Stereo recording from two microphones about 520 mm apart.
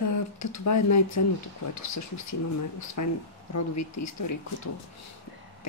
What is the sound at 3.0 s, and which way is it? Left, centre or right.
Speech, left.